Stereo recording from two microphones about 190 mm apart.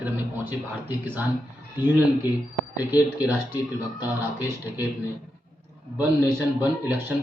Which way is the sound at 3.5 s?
20° left (ahead or behind).